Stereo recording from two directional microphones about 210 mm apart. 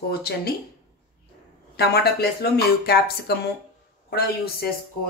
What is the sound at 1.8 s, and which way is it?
Speech, 50° left (ahead or behind).